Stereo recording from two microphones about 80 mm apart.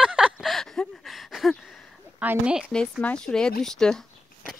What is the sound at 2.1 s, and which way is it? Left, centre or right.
Speech, centre.